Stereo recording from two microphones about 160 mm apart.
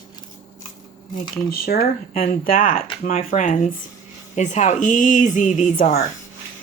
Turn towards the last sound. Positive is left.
turn(degrees=60)  # may be behind; listen again after turning